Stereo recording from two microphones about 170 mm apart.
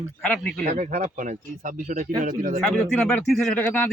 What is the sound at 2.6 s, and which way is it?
Speech, 5° left (ahead or behind).